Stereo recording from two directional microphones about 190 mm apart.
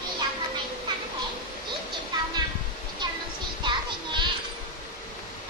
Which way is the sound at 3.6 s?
25° right (ahead or behind).